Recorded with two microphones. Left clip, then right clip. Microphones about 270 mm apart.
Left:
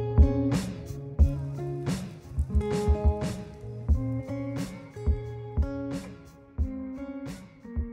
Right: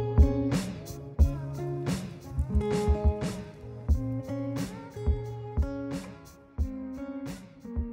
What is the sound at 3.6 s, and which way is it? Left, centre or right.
Music, right.